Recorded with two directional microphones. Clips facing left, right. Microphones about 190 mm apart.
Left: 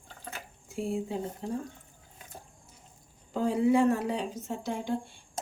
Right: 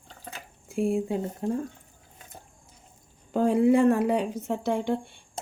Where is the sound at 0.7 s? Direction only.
55° right (ahead or behind).